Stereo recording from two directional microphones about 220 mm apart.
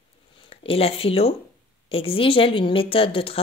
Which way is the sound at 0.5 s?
25° left (ahead or behind).